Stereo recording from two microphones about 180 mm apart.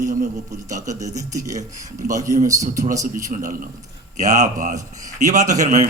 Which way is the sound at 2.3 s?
40° right (ahead or behind).